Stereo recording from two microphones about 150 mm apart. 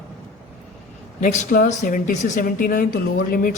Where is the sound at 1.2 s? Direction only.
55° left (ahead or behind).